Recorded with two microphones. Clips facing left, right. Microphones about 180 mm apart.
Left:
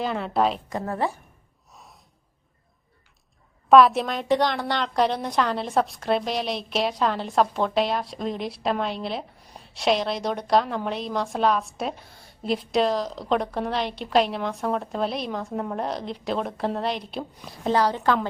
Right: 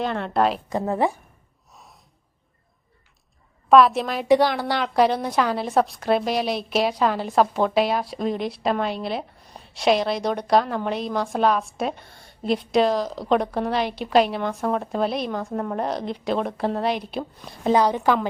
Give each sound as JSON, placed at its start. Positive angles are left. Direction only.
{"t": 0.0, "sound": "a woman's voice", "side_deg": 0}
{"t": 0.7, "sound": "a woman's voice", "side_deg": -20}
{"t": 1.7, "sound": "gasp", "side_deg": 0}
{"t": 3.7, "sound": "a woman's voice", "side_deg": 0}
{"t": 17.7, "sound": "a woman's voice", "side_deg": -15}